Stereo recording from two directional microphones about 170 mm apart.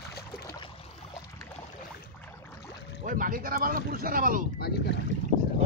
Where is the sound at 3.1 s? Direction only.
55° right (ahead or behind).